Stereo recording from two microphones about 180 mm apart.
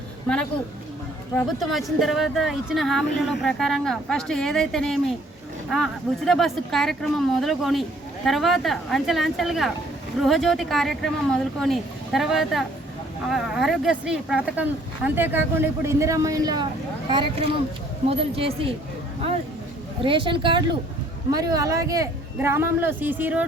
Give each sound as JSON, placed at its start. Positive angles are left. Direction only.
{"t": 1.5, "sound": "speech", "side_deg": 0}
{"t": 20.0, "sound": "speech", "side_deg": -30}